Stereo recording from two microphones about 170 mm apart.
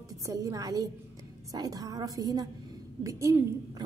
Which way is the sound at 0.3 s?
20° right (ahead or behind).